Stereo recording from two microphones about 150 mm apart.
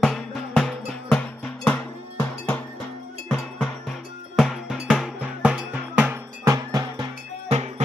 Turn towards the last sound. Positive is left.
turn(degrees=-50)  # may be behind; listen again after turning